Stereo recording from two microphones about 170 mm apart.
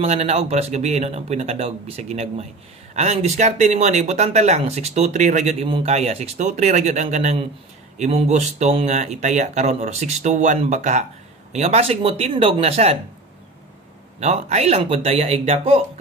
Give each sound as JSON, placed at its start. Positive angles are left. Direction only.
{"t": 0.0, "sound": "speech", "side_deg": -40}
{"t": 14.2, "sound": "speech", "side_deg": -40}